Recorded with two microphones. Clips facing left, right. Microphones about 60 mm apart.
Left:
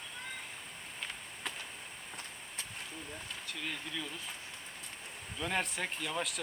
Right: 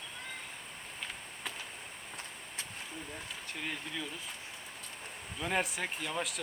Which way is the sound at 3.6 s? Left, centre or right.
Centre.